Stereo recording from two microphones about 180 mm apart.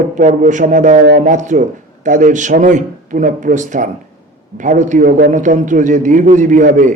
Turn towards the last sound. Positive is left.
turn(degrees=-45)  # may be behind; listen again after turning